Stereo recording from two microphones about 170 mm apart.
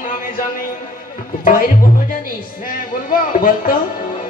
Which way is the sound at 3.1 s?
55° left (ahead or behind).